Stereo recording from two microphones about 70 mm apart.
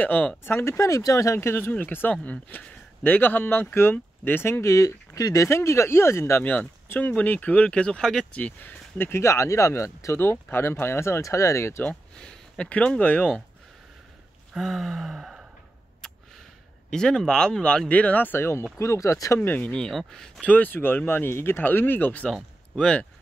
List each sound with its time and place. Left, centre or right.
0.0 s speech: left
0.4 s speech: left
6.4 s speech: centre; by 10.1 s left
10.1 s speech: left
11.8 s speech: centre
14.5 s gasp: centre
16.9 s speech: centre; by 18.6 s left
18.8 s speech: left
19.4 s speech: left
19.7 s speech: centre
20.4 s speech: left